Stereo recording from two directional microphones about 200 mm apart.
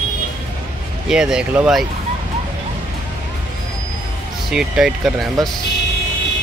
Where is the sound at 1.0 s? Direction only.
5° right (ahead or behind).